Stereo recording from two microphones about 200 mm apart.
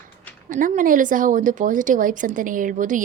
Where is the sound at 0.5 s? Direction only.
40° right (ahead or behind).